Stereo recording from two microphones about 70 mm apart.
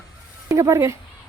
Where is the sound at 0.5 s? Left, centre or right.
Right.